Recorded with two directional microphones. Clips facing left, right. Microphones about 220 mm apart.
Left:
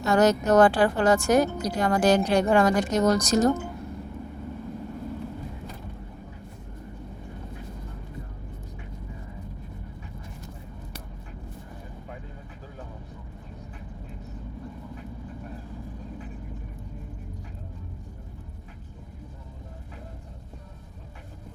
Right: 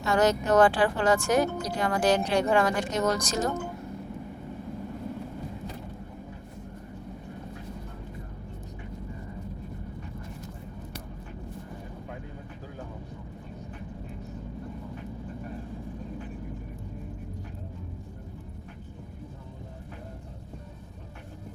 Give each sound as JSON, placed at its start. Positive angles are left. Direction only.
{"t": 0.0, "sound": "speech", "side_deg": 40}